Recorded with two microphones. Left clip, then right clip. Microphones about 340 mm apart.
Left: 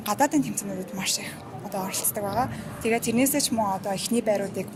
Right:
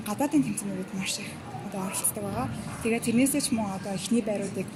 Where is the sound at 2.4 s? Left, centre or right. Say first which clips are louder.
Left 6 dB; left.